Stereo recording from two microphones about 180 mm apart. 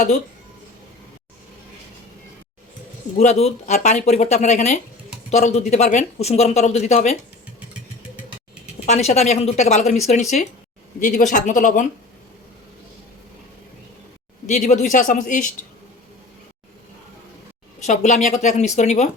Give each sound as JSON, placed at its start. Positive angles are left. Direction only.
{"t": 3.2, "sound": "speech", "side_deg": 35}
{"t": 8.9, "sound": "speech", "side_deg": 40}
{"t": 14.4, "sound": "speech", "side_deg": 40}
{"t": 17.8, "sound": "speech", "side_deg": 40}